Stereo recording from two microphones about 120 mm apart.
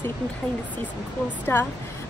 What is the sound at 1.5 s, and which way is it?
Speech, 20° left (ahead or behind).